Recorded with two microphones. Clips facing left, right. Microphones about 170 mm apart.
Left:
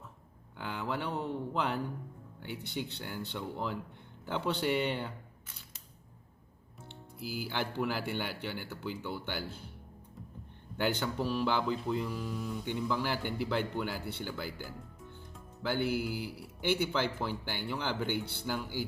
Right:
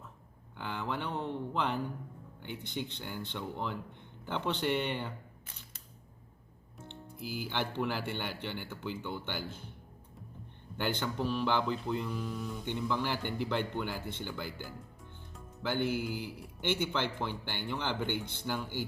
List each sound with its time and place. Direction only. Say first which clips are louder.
0.5 s a sound: left 1 dB; 5° left (ahead or behind)
2.7 s speech: even; 5° left (ahead or behind)
6.8 s speech: even; 5° left (ahead or behind)
10.8 s speech: left 2 dB; 5° left (ahead or behind)